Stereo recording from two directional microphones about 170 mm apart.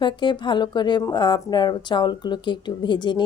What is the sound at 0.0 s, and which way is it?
Speech, 25° left (ahead or behind).